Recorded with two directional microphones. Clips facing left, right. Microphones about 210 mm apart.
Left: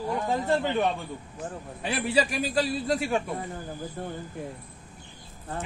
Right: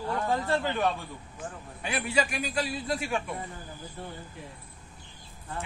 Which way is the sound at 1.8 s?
35° left (ahead or behind).